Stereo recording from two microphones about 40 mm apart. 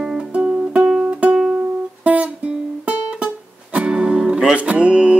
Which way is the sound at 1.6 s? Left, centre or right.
Right.